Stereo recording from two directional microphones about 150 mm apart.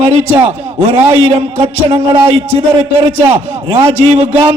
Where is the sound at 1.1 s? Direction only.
40° right (ahead or behind).